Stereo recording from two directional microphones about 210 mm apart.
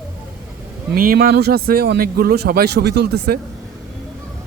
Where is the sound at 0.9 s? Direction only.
45° right (ahead or behind).